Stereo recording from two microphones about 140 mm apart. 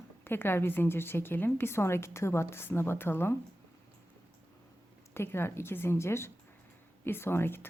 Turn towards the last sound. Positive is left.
turn(degrees=15)  # may be behind; listen again after turning